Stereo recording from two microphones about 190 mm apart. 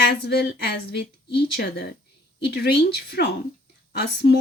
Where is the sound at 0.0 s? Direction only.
55° left (ahead or behind).